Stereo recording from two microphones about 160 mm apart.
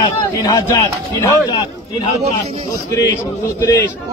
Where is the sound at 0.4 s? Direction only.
20° left (ahead or behind).